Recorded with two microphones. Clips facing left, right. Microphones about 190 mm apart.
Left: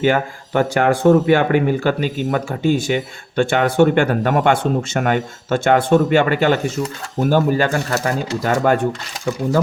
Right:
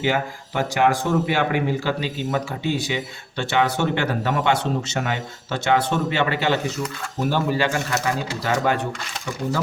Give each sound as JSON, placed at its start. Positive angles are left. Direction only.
{"t": 0.0, "sound": "speech", "side_deg": 55}